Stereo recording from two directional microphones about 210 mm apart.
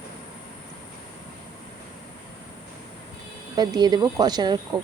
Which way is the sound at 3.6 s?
20° right (ahead or behind).